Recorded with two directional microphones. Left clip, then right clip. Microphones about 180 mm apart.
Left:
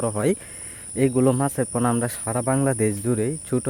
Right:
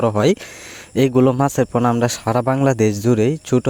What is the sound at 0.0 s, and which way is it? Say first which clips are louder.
Speech: right 7 dB; 50° right (ahead or behind).